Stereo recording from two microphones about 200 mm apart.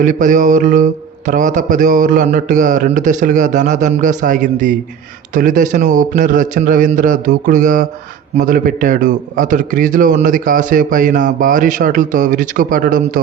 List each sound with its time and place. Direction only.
0.0 s a man's voice: 40° right (ahead or behind)